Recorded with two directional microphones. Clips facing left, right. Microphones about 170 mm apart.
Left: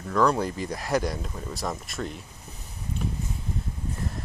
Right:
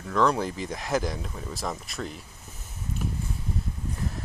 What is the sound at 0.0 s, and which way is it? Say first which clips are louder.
Speech: left 1 dB; centre (ahead or behind).